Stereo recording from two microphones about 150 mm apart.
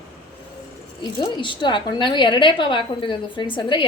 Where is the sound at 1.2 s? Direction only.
30° left (ahead or behind).